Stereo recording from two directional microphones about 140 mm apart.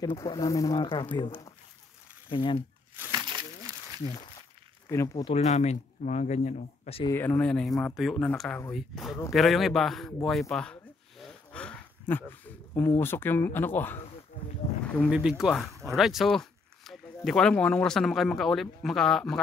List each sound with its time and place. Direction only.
0.0 s speech: 25° left (ahead or behind)
0.7 s speech: 35° left (ahead or behind)
3.1 s crumpling: 30° right (ahead or behind)
4.8 s speech: 20° left (ahead or behind)
5.3 s speech: 50° left (ahead or behind)
7.1 s speech: 15° left (ahead or behind)
10.5 s a sound: 5° left (ahead or behind)
12.9 s speech: 15° left (ahead or behind)
15.0 s speech: 5° right (ahead or behind)